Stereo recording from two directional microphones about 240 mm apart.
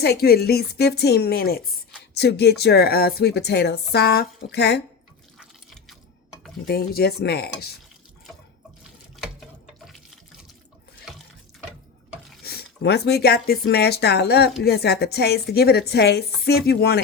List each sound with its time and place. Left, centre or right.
0.0 s a woman's voice: left
5.4 s water: centre
6.7 s a woman's voice: left
12.4 s a woman's voice: left